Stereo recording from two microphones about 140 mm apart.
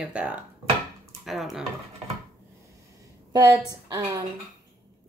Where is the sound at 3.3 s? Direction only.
25° right (ahead or behind).